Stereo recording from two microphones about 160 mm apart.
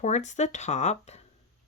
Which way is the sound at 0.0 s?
45° left (ahead or behind).